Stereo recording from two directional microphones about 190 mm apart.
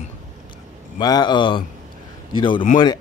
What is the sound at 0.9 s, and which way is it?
Speech, 20° left (ahead or behind).